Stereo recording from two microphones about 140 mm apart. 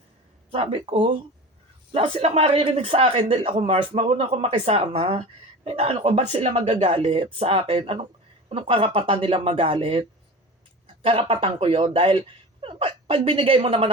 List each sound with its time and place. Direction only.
0.5 s speech: 40° right (ahead or behind)